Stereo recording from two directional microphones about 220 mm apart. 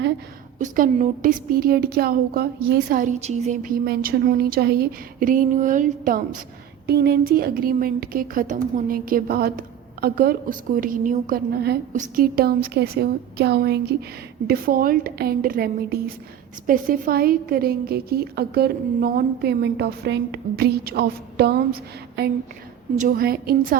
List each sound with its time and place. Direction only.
0.6 s a woman's voice: 35° right (ahead or behind)